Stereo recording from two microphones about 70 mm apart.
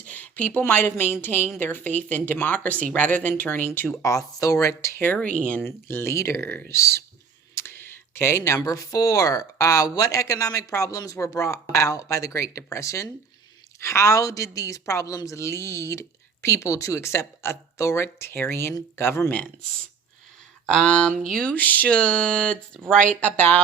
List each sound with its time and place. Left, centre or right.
0.0 s a sound: left
0.6 s speech: left
4.0 s a woman's voice: left
5.1 s speech: centre
5.6 s speech: left
7.5 s a sound: left
8.4 s a woman's voice: left
20.7 s speech: centre
21.5 s speech: left